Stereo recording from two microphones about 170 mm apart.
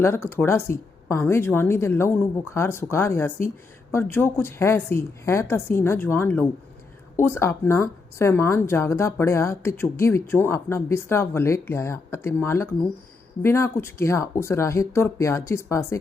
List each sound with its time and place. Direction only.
0.0 s a woman's voice: 15° left (ahead or behind)